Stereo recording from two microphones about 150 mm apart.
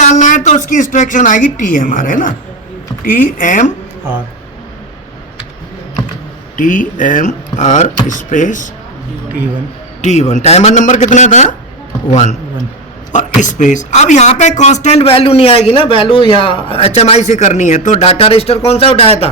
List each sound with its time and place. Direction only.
0.0 s a woman's voice: 55° left (ahead or behind)
6.6 s speech: 60° left (ahead or behind)
10.0 s a man's voice: 50° left (ahead or behind)